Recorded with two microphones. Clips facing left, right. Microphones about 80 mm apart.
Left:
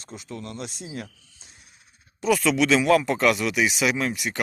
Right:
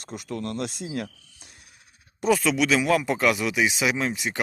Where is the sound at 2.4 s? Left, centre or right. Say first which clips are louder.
Left 2 dB; centre.